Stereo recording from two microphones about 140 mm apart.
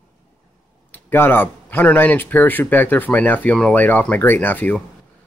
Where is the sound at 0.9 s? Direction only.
15° left (ahead or behind).